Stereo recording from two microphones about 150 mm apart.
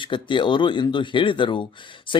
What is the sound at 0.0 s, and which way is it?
Speech, 35° left (ahead or behind).